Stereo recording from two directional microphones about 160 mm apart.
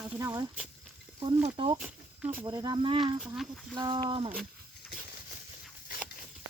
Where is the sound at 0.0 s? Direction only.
20° right (ahead or behind).